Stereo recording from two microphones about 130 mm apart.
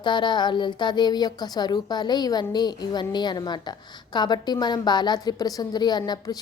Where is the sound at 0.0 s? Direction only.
35° left (ahead or behind).